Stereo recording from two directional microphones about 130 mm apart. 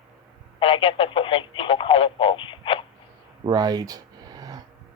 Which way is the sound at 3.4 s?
30° right (ahead or behind).